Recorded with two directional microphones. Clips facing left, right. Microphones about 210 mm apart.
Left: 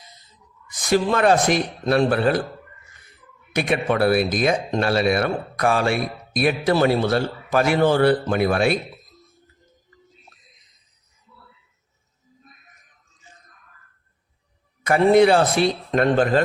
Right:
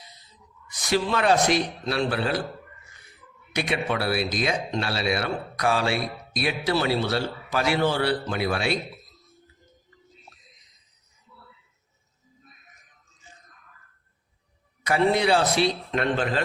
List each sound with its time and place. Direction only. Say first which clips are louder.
0.7 s speech: left 5 dB; 50° left (ahead or behind)
3.5 s speech: left 5 dB; 50° left (ahead or behind)
10.3 s a sound: even; 50° left (ahead or behind)
14.8 s speech: left 7 dB; 50° left (ahead or behind)